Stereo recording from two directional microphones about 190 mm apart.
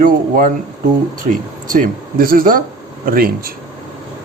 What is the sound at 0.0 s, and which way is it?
Speech, 45° right (ahead or behind).